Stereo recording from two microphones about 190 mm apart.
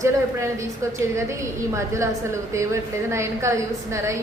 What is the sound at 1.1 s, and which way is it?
A woman's voice, 15° right (ahead or behind).